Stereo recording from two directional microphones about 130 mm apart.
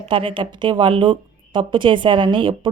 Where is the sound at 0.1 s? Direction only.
40° right (ahead or behind).